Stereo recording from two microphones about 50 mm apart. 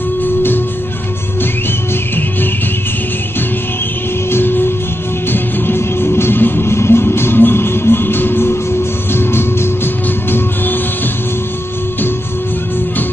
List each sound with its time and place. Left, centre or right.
4.3 s music: left